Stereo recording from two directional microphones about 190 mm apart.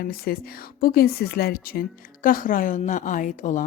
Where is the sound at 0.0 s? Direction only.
55° left (ahead or behind).